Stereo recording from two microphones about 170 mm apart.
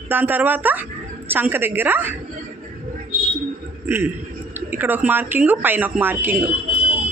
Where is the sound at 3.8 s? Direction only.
10° right (ahead or behind).